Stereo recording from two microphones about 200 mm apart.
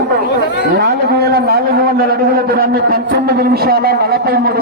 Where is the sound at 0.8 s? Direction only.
55° right (ahead or behind).